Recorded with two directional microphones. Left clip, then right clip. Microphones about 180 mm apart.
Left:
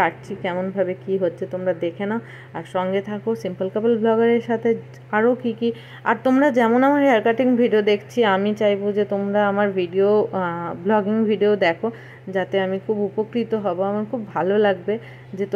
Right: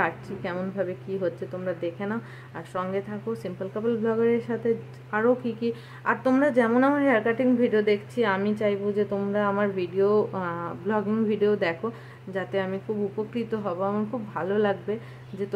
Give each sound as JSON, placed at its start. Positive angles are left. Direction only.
{"t": 0.0, "sound": "a woman's voice", "side_deg": 15}